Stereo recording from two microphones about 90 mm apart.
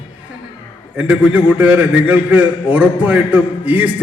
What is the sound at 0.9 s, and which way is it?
A man's voice, 15° right (ahead or behind).